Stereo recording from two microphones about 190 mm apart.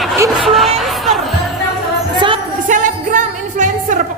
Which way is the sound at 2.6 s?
40° right (ahead or behind).